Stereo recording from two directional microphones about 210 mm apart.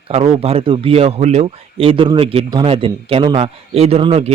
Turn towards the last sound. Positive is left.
turn(degrees=-30)  # may be behind; listen again after turning